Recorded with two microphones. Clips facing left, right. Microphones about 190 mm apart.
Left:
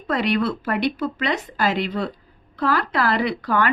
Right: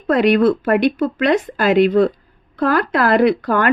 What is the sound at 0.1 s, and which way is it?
A woman's voice, 55° right (ahead or behind).